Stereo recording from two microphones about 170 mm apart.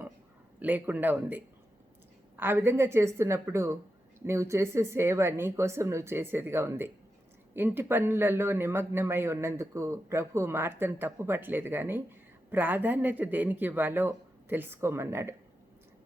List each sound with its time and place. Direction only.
0.6 s a man's voice: 10° right (ahead or behind)